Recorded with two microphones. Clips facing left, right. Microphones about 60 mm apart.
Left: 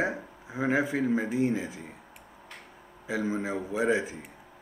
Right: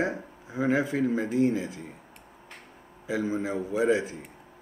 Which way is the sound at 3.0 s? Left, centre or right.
Left.